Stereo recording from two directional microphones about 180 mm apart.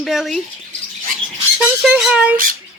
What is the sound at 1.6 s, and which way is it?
Speech, 5° right (ahead or behind).